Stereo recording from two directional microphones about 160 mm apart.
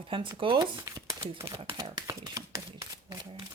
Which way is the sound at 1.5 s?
35° right (ahead or behind).